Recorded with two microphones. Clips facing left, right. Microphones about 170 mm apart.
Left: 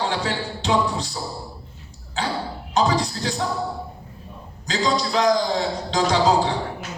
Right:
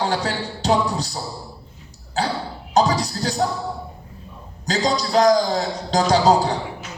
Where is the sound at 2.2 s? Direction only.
40° right (ahead or behind).